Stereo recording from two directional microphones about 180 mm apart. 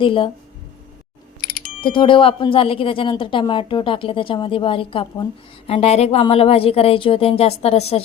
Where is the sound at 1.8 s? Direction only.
30° left (ahead or behind).